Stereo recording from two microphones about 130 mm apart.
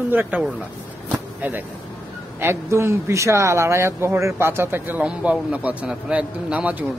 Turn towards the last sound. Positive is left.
turn(degrees=-10)  # may be behind; listen again after turning